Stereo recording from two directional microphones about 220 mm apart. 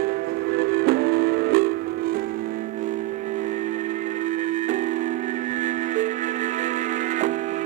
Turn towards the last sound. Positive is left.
turn(degrees=-35)  # may be behind; listen again after turning